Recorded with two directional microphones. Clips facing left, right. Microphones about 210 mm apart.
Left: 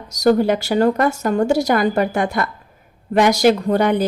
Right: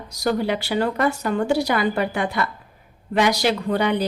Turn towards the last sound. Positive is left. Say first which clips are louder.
# left 4 dB
turn(degrees=45)  # may be behind; listen again after turning